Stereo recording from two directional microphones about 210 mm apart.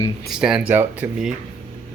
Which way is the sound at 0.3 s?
5° right (ahead or behind).